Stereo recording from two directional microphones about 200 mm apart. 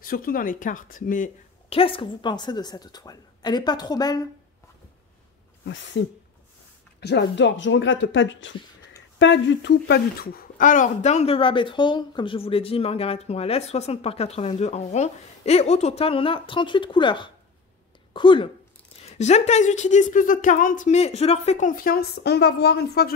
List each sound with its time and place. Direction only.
0.0 s speech: 45° left (ahead or behind)
1.7 s speech: 25° left (ahead or behind)
7.0 s a woman's voice: 55° left (ahead or behind)